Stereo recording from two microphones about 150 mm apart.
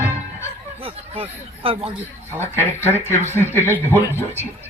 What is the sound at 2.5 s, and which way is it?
Speech, 15° left (ahead or behind).